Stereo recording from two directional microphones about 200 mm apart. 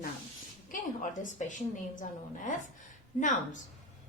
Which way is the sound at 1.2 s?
40° left (ahead or behind).